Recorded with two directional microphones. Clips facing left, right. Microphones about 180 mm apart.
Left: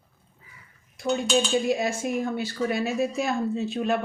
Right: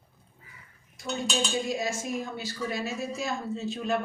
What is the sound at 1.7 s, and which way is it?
A man's voice, 60° left (ahead or behind).